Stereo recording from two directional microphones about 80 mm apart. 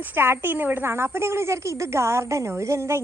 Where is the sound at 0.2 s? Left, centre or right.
Right.